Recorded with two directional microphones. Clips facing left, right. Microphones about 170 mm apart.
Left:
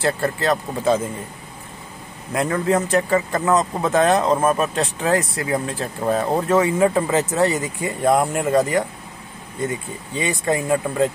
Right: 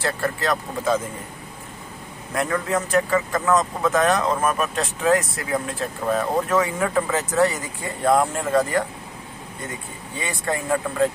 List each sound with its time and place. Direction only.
0.0 s a man's voice: 30° left (ahead or behind)
2.3 s a man's voice: 30° left (ahead or behind)
10.2 s a man's voice: 20° left (ahead or behind)